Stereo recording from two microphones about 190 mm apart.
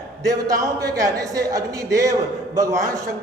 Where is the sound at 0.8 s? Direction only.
20° right (ahead or behind).